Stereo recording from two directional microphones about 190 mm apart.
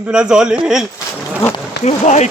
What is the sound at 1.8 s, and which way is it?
Speech, 35° left (ahead or behind).